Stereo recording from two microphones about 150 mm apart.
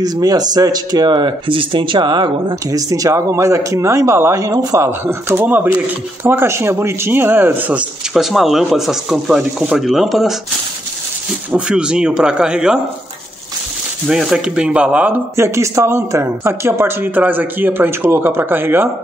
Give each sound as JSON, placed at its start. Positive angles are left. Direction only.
{"t": 0.0, "sound": "speech", "side_deg": -25}
{"t": 11.5, "sound": "a man's voice", "side_deg": -5}
{"t": 14.0, "sound": "speech", "side_deg": -5}